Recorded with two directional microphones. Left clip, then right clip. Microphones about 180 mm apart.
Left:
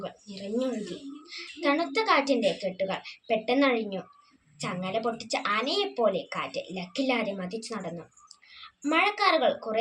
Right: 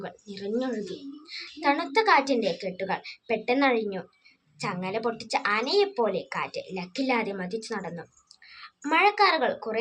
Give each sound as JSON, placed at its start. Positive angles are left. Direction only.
{"t": 0.0, "sound": "speech", "side_deg": -15}
{"t": 9.0, "sound": "speech", "side_deg": -15}